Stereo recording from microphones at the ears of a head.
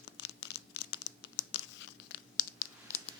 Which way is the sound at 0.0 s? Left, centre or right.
Left.